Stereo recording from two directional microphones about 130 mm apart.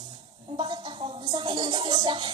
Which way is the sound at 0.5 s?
35° right (ahead or behind).